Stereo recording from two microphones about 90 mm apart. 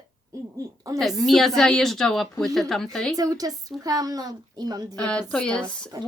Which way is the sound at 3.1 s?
45° right (ahead or behind).